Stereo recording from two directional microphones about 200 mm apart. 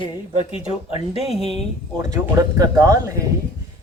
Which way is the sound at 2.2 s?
15° right (ahead or behind).